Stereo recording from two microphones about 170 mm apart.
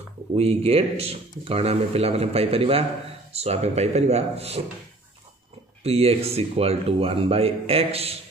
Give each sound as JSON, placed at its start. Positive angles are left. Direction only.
{"t": 0.4, "sound": "a man's voice", "side_deg": -35}
{"t": 5.9, "sound": "a man's voice", "side_deg": -35}